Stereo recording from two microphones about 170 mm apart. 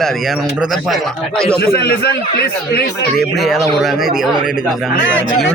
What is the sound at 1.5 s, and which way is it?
A man's voice, 65° left (ahead or behind).